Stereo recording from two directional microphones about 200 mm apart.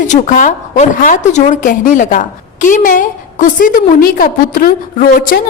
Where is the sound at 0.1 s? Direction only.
40° left (ahead or behind).